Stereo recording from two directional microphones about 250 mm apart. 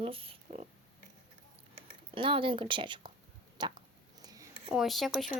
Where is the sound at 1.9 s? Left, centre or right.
Centre.